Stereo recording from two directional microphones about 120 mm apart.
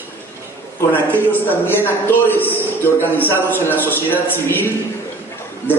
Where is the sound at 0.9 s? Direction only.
15° left (ahead or behind).